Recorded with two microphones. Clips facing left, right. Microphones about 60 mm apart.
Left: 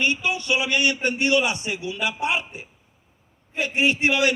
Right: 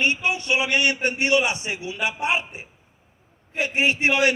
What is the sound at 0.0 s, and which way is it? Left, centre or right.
A man's voice, right.